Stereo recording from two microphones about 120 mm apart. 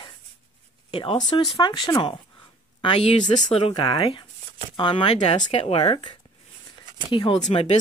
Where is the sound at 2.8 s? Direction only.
60° left (ahead or behind).